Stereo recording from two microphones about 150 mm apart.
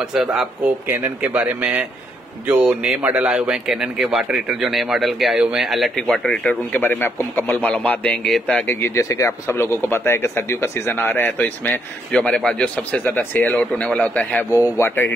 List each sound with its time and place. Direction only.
0.1 s speech: 5° right (ahead or behind); by 15.1 s 15° left (ahead or behind)